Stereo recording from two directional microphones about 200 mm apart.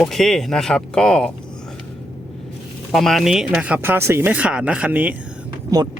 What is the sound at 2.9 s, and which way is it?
Speech, centre (ahead or behind).